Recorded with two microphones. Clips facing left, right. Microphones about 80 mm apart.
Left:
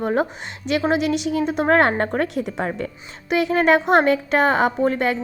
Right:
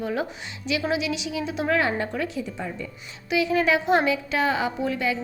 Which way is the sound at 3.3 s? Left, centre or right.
Left.